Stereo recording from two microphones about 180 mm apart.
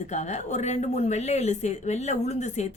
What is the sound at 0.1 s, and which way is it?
Speech, 40° left (ahead or behind).